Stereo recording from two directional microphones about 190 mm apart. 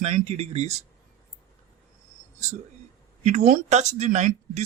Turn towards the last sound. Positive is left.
turn(degrees=-40)  # may be behind; listen again after turning